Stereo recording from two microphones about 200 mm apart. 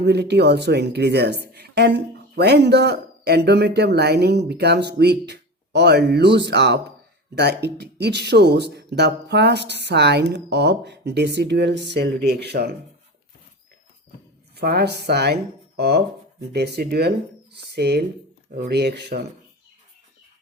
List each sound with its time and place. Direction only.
0.0 s speech: 55° right (ahead or behind)
14.5 s speech: 50° right (ahead or behind)